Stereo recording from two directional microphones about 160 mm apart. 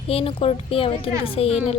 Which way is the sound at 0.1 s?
35° left (ahead or behind).